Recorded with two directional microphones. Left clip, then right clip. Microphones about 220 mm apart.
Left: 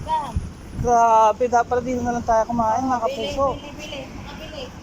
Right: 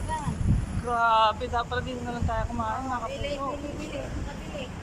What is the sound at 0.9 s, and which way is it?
Speech, 25° left (ahead or behind).